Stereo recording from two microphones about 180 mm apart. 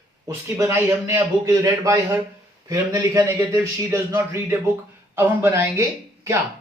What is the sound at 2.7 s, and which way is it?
A man's voice, 20° right (ahead or behind).